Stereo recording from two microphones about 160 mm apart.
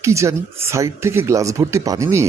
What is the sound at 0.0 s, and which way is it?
Speech, 20° right (ahead or behind).